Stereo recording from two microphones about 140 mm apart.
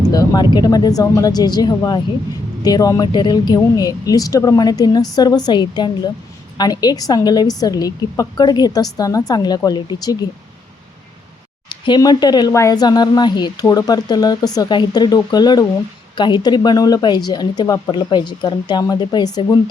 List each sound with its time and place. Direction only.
0.0 s speech: 30° left (ahead or behind)
11.7 s speech: 30° left (ahead or behind)